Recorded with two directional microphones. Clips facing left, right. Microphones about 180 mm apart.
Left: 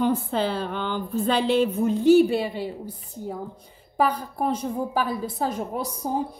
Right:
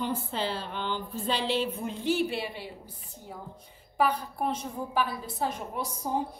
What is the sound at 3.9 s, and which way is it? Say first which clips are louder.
A woman's voice: left 3 dB; 40° left (ahead or behind).